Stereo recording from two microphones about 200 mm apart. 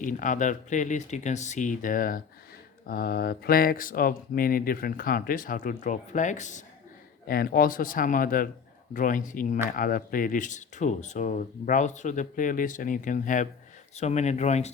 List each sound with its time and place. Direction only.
0.0 s speech: 40° left (ahead or behind)
7.3 s speech: 50° left (ahead or behind)